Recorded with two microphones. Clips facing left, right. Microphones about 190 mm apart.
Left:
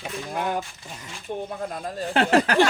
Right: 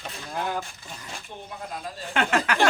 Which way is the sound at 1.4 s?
50° left (ahead or behind).